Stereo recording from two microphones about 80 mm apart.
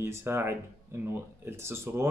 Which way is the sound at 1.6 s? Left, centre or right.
Right.